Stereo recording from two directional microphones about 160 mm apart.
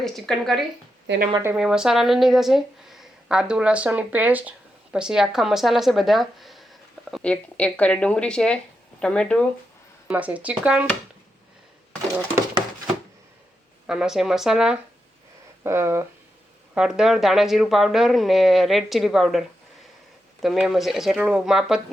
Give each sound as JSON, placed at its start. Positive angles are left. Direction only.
{"t": 0.0, "sound": "speech", "side_deg": 0}
{"t": 1.0, "sound": "speech", "side_deg": -90}
{"t": 1.5, "sound": "speech", "side_deg": -5}
{"t": 10.1, "sound": "speech", "side_deg": -10}
{"t": 13.8, "sound": "speech", "side_deg": -5}
{"t": 15.6, "sound": "speech", "side_deg": -15}
{"t": 16.7, "sound": "speech", "side_deg": -5}